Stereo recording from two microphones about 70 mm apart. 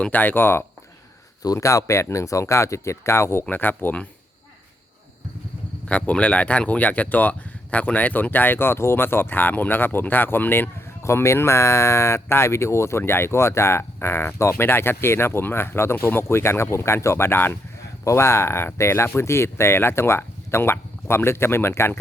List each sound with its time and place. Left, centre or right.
0.0 s speech: left
1.5 s speech: left
3.5 s speech: left
5.9 s speech: centre
11.0 s speech: left